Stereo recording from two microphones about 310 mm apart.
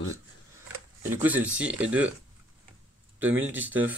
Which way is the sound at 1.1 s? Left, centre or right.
Centre.